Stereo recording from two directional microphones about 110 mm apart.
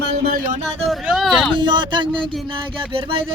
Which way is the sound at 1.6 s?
45° right (ahead or behind).